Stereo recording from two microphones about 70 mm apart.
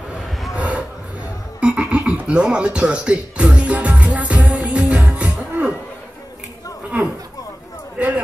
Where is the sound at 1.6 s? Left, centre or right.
Centre.